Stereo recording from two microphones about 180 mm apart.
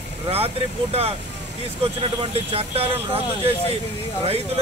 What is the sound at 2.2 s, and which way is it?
Speech, 35° right (ahead or behind).